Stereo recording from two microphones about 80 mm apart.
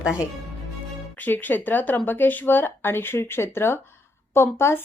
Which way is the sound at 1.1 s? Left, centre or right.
Left.